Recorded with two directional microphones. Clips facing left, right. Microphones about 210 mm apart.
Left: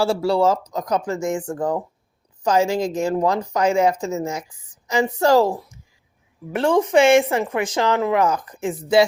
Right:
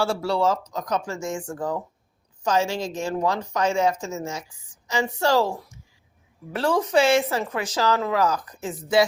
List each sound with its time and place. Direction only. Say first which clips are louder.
0.0 s speech: left 4 dB; 30° left (ahead or behind)
6.6 s speech: left 4 dB; 25° left (ahead or behind)